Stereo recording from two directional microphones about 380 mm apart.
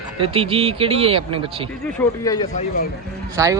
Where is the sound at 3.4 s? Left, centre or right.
Centre.